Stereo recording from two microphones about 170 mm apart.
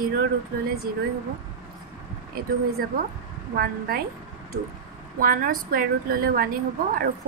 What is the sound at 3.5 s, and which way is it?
Speech, 60° right (ahead or behind).